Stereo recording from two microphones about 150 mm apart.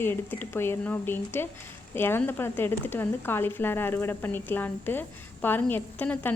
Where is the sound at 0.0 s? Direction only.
15° left (ahead or behind).